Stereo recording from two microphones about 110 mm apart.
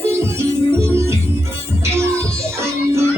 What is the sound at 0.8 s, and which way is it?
Music, 25° right (ahead or behind).